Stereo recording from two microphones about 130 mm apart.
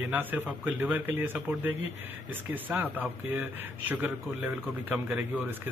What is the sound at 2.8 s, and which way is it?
A man's voice, 15° right (ahead or behind).